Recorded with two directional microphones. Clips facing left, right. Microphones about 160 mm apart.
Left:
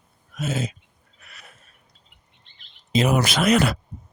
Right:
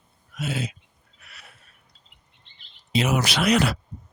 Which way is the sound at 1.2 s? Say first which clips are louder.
Left 2 dB; 45° left (ahead or behind).